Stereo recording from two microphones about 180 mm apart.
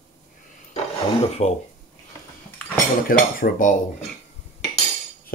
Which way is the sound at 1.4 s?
35° left (ahead or behind).